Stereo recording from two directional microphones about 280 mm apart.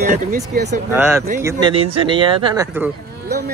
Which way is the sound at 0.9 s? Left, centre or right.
Centre.